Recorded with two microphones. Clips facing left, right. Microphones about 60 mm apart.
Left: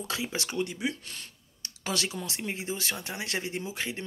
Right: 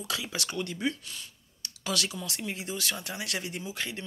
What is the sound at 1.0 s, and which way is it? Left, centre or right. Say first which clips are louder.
Speech: even; left.